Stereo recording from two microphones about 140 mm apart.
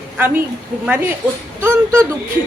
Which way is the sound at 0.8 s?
15° right (ahead or behind).